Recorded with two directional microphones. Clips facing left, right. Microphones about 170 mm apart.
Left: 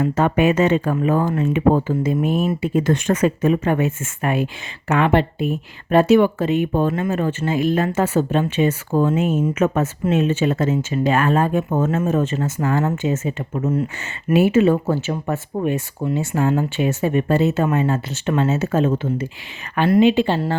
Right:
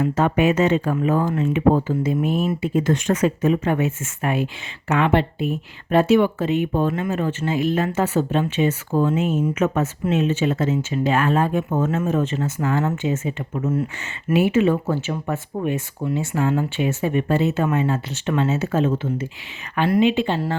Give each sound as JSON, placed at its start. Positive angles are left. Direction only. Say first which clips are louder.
{"t": 0.0, "sound": "speech", "louder": "left 1 dB", "side_deg": 55}
{"t": 20.0, "sound": "speech", "louder": "left 4 dB", "side_deg": 35}